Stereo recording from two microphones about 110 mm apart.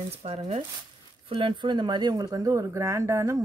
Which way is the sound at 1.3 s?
50° right (ahead or behind).